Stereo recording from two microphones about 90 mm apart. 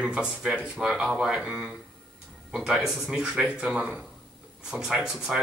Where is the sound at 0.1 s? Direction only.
10° right (ahead or behind).